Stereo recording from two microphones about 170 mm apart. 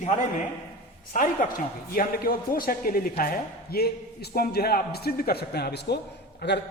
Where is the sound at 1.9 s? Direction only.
60° left (ahead or behind); by 6.6 s 75° left (ahead or behind).